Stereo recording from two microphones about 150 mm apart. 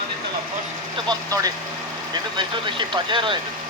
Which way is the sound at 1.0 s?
25° right (ahead or behind).